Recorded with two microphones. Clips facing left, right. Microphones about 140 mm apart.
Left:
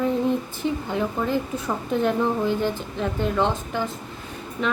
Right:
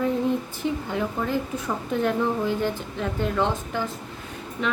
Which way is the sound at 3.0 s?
20° left (ahead or behind).